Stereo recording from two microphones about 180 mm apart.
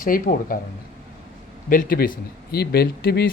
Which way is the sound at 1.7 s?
50° left (ahead or behind).